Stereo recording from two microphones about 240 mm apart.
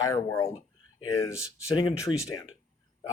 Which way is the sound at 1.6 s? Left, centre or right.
Centre.